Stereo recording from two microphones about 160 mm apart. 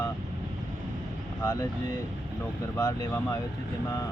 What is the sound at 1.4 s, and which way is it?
Speech, 25° left (ahead or behind).